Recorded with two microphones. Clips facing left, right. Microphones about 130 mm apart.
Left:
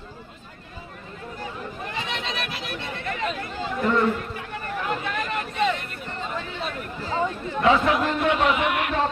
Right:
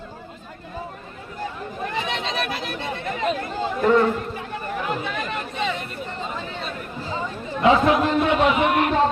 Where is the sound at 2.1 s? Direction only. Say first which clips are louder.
Right 5 dB; 35° right (ahead or behind).